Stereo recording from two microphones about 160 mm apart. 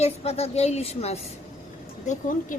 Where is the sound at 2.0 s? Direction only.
55° left (ahead or behind).